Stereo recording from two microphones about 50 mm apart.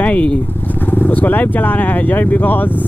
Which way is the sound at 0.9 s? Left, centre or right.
Left.